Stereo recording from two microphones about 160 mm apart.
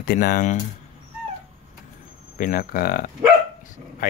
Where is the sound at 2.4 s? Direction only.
60° left (ahead or behind).